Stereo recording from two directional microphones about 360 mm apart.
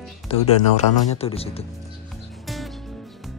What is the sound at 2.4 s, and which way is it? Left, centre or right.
Music, centre.